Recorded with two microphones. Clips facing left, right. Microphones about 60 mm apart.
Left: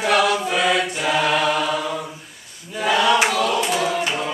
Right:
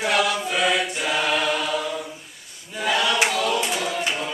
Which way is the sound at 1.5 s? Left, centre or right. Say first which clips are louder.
Left 3 dB; left.